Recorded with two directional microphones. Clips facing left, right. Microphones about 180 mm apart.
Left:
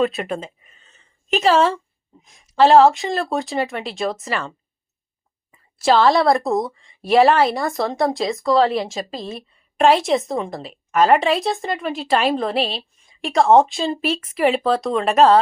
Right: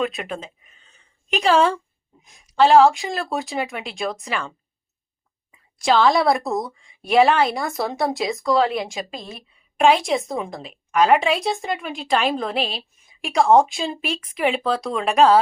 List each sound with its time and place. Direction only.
0.0 s a sound: centre (ahead or behind)
2.2 s speech: centre (ahead or behind)
5.8 s a woman's voice: centre (ahead or behind)